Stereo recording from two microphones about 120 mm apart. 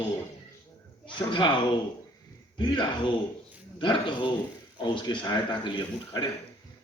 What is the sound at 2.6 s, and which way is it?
A man's voice, 40° left (ahead or behind).